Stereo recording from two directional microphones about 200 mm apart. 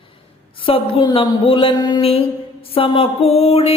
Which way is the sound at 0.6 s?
25° left (ahead or behind).